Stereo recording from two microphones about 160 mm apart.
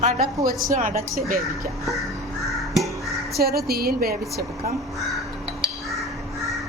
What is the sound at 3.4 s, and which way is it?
Speech, 75° right (ahead or behind).